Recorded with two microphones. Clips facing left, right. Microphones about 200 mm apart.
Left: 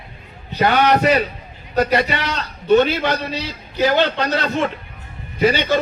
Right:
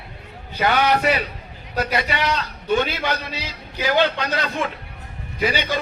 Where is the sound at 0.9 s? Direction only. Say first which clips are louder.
Left 4 dB; 45° left (ahead or behind).